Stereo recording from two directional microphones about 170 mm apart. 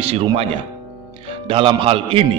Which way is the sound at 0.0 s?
35° right (ahead or behind).